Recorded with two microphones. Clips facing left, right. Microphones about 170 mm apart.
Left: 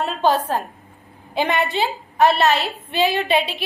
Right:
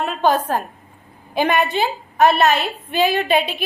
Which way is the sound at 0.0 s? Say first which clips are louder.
Right 1 dB; 20° right (ahead or behind).